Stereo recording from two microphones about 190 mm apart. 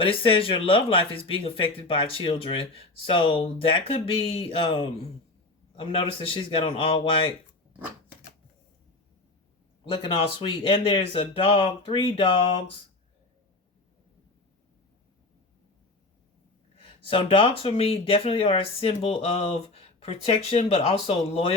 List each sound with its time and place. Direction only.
0.0 s speech: 30° left (ahead or behind)
9.9 s speech: 25° left (ahead or behind)
16.7 s speech: 30° left (ahead or behind)